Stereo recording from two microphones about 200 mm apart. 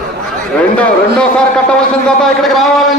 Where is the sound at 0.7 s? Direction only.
5° left (ahead or behind).